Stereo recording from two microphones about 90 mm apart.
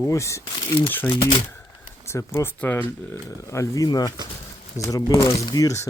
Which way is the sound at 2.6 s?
20° left (ahead or behind).